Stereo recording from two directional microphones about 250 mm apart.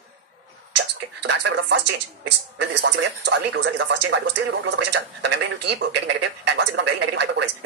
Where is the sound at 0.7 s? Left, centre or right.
Right.